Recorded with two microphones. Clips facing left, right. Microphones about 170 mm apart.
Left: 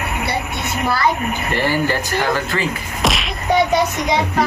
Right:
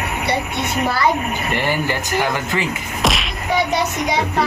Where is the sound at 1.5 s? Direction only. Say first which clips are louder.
Left 3 dB; 20° right (ahead or behind).